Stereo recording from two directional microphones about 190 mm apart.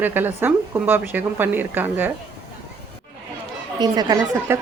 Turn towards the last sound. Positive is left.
turn(degrees=-15)  # may be behind; listen again after turning